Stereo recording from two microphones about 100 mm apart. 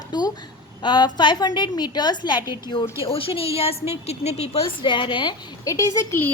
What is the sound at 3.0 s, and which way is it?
A woman's voice, 65° left (ahead or behind).